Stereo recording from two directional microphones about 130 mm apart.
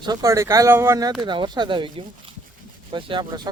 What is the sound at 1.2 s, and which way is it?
A man's voice, 35° right (ahead or behind).